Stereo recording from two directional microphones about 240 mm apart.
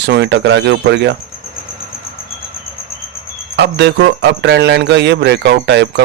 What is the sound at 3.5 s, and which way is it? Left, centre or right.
Speech, right.